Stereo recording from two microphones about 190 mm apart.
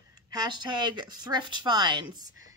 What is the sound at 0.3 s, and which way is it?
Speech, 20° right (ahead or behind).